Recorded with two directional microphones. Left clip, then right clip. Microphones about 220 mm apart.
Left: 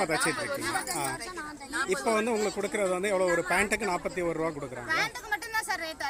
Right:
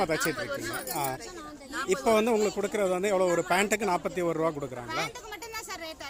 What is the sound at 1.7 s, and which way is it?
Speech, 20° right (ahead or behind).